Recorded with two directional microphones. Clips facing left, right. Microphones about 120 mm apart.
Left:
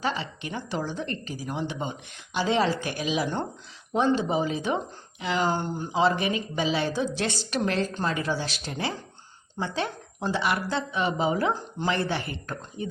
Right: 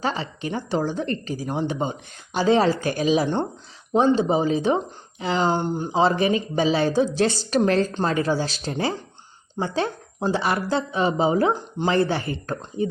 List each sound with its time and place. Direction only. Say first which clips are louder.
0.0 s speech: right 3 dB; 35° right (ahead or behind)
11.5 s speech: right 5 dB; 20° right (ahead or behind)
11.9 s speech: right 6 dB; 35° right (ahead or behind)